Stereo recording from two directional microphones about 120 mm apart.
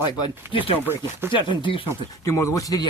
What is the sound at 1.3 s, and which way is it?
Speech, 40° left (ahead or behind).